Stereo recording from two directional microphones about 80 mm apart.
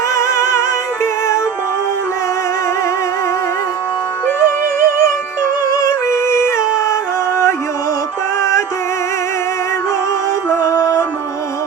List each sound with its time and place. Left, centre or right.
0.1 s music: left
4.3 s music: left
5.6 s yodeling: left
8.4 s music: left
10.5 s music: left